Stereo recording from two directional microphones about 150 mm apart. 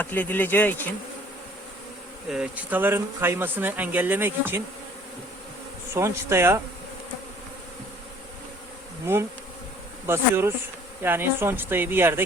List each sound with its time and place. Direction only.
0.0 s speech: 10° left (ahead or behind)
2.3 s speech: 10° right (ahead or behind)
5.9 s speech: 20° right (ahead or behind)
10.1 s speech: 15° right (ahead or behind)